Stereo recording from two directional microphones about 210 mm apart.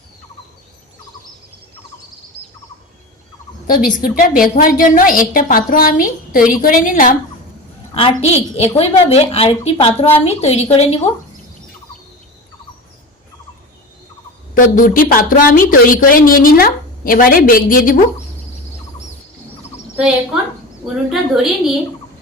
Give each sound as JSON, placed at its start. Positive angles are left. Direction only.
{"t": 3.7, "sound": "a woman's voice", "side_deg": 40}
{"t": 8.2, "sound": "a woman's voice", "side_deg": 30}
{"t": 14.5, "sound": "a woman's voice", "side_deg": 40}
{"t": 20.8, "sound": "a woman's voice", "side_deg": 0}